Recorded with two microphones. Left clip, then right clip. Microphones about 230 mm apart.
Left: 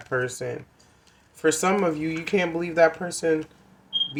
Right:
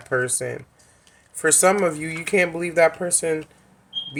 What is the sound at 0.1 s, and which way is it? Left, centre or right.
Speech, right.